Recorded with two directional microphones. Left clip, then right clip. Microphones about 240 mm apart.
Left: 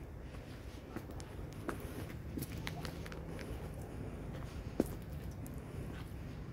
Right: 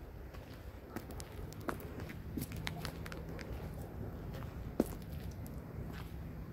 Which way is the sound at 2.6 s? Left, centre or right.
Right.